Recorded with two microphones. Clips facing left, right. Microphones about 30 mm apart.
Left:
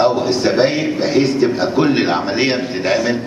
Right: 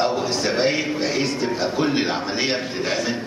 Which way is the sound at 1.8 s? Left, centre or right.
Left.